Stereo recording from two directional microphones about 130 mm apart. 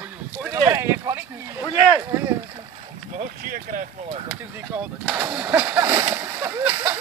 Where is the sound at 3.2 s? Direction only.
90° right.